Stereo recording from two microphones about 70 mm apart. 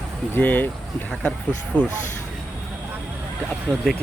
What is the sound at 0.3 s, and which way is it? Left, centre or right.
Speech, left.